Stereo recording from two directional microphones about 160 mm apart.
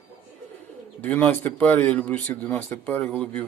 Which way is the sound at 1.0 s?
10° left (ahead or behind).